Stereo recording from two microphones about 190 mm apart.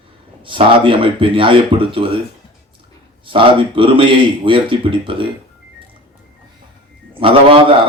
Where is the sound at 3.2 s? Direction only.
25° right (ahead or behind).